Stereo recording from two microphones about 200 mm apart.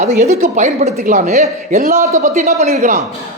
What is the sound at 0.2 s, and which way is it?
A woman's voice, 35° right (ahead or behind).